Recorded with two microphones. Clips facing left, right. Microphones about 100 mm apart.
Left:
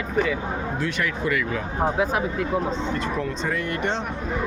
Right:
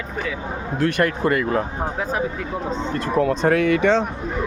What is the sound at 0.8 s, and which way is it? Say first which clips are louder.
Speech: right 10 dB; 50° right (ahead or behind).